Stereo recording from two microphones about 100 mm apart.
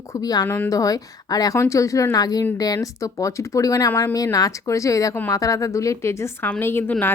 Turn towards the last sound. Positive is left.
turn(degrees=25)  # may be behind; listen again after turning